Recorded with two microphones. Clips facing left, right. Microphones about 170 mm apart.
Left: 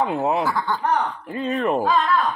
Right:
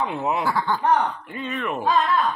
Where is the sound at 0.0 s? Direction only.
40° left (ahead or behind).